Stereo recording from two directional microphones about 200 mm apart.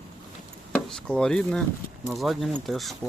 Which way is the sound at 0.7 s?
5° left (ahead or behind).